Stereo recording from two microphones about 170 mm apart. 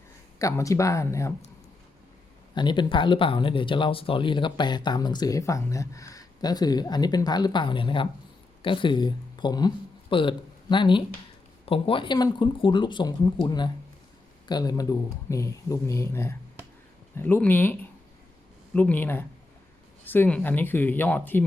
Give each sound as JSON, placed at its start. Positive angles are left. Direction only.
{"t": 0.3, "sound": "speech", "side_deg": 20}
{"t": 2.6, "sound": "speech", "side_deg": 25}